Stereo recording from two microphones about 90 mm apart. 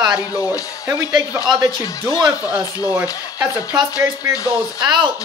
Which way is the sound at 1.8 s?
40° left (ahead or behind).